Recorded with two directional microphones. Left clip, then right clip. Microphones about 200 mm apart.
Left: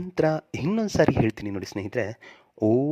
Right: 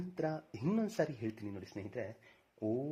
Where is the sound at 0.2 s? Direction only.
45° left (ahead or behind).